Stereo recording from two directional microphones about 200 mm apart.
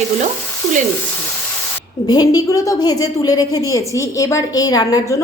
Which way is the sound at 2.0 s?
20° left (ahead or behind).